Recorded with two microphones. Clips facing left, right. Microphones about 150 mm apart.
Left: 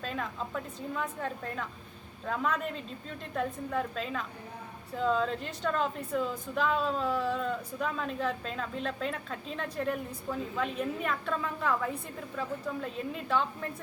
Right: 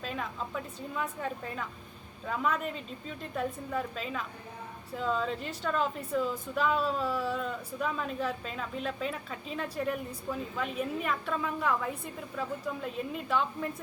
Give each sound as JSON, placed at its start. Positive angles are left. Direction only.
{"t": 0.0, "sound": "a woman's voice", "side_deg": -5}